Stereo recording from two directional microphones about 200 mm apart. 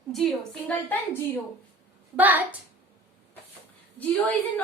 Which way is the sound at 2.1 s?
10° right (ahead or behind).